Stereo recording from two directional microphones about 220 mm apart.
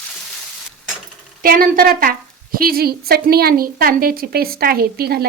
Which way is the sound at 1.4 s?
40° right (ahead or behind).